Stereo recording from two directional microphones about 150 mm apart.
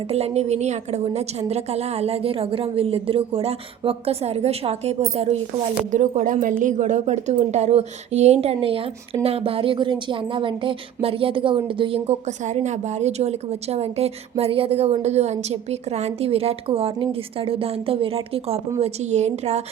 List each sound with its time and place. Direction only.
0.1 s a woman's voice: 45° right (ahead or behind)
5.9 s a woman's voice: 55° right (ahead or behind)